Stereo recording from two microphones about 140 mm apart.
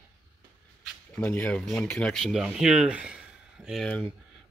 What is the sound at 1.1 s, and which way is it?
Speech, 10° left (ahead or behind).